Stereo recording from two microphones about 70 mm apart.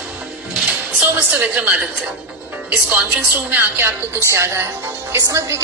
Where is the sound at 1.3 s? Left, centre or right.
Centre.